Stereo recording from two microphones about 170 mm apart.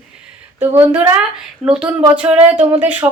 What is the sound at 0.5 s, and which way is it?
A woman's voice, 10° right (ahead or behind).